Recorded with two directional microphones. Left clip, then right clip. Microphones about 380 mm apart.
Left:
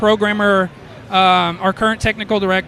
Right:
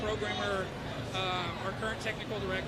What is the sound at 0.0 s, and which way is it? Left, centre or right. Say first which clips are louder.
Speech: left 19 dB; left.